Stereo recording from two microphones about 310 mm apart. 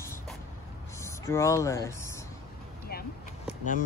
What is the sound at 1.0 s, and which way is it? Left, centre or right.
Speech, centre.